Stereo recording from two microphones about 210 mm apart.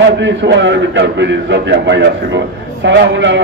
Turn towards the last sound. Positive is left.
turn(degrees=-60)  # may be behind; listen again after turning